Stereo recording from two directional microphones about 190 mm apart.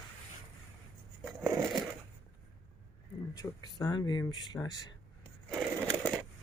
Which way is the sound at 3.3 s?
20° left (ahead or behind).